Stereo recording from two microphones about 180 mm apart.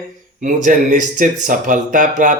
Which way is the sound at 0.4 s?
45° right (ahead or behind).